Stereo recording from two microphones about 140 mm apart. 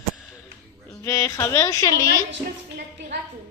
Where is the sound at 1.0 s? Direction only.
20° left (ahead or behind).